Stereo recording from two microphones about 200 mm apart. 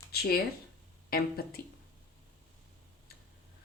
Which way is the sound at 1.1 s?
50° left (ahead or behind).